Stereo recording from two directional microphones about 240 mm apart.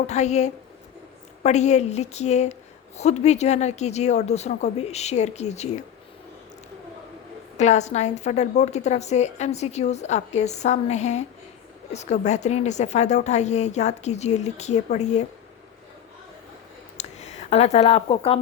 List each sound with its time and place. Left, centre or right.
0.1 s a woman's voice: left
7.5 s a woman's voice: left
17.0 s a sound: left
17.5 s a woman's voice: left